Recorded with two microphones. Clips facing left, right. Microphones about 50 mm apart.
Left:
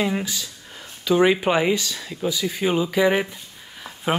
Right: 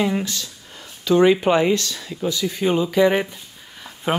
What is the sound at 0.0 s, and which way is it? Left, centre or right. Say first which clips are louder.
Speech: right 2 dB; centre.